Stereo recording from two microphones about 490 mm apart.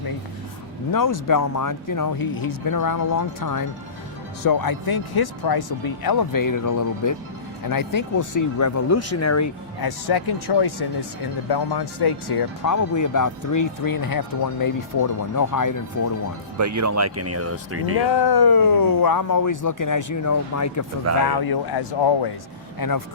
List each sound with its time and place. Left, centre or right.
0.9 s speech: left
9.8 s speech: left
16.6 s speech: right
18.1 s speech: left
21.2 s speech: left
22.8 s speech: left